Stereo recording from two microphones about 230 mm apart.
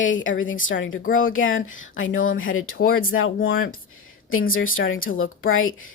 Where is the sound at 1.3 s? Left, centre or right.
Left.